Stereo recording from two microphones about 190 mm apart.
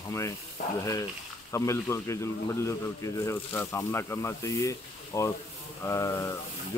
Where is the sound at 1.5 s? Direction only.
15° left (ahead or behind).